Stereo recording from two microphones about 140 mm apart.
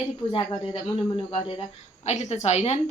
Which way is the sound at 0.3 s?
35° left (ahead or behind).